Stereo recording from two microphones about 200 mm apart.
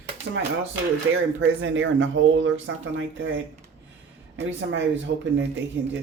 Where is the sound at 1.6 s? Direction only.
70° right (ahead or behind).